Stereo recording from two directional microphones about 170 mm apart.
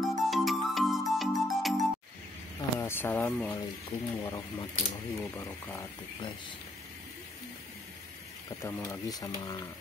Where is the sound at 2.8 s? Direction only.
10° left (ahead or behind).